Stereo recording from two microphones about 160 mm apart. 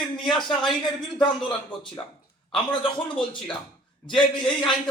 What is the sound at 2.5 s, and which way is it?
A man's voice, 30° left (ahead or behind).